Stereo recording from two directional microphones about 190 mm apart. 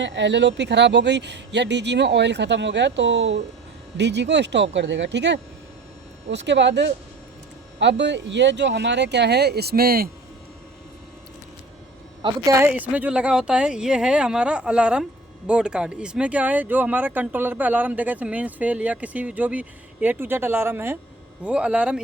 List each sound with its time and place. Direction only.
0.0 s speech: 70° right (ahead or behind); by 10.1 s 50° right (ahead or behind)
12.2 s speech: 15° right (ahead or behind)